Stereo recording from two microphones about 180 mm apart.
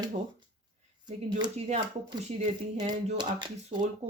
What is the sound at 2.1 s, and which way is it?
Speech, 35° right (ahead or behind).